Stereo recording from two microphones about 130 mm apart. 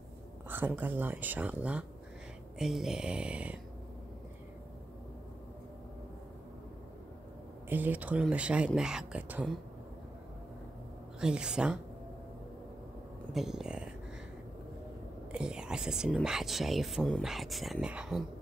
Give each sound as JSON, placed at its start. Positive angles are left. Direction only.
{"t": 0.5, "sound": "speech", "side_deg": -15}
{"t": 7.7, "sound": "speech", "side_deg": -15}
{"t": 11.1, "sound": "speech", "side_deg": -5}
{"t": 13.3, "sound": "speech", "side_deg": 0}
{"t": 15.3, "sound": "speech", "side_deg": -5}